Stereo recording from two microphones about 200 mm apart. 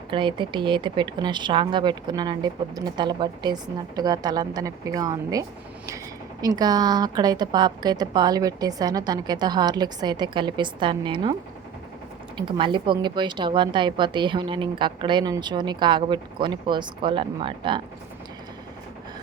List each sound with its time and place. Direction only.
0.1 s speech: 25° right (ahead or behind)
12.4 s speech: 25° right (ahead or behind)